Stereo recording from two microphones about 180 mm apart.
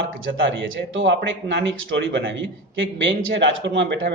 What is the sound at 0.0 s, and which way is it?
Speech, 90° right.